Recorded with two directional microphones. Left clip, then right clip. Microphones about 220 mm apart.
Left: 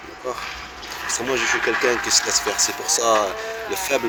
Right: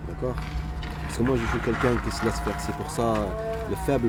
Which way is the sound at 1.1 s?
5° right (ahead or behind).